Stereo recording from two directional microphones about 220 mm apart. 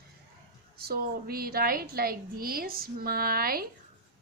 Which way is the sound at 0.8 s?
45° right (ahead or behind).